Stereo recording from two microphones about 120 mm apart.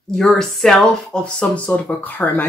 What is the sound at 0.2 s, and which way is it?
Speech, centre (ahead or behind).